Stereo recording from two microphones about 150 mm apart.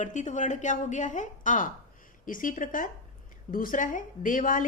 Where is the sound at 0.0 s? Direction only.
55° left (ahead or behind).